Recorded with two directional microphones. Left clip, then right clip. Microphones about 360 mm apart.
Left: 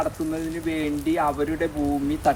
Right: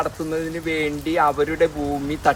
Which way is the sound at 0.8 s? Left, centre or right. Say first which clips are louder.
Right 4 dB; right.